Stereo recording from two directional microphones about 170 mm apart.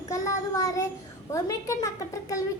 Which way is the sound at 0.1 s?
20° left (ahead or behind).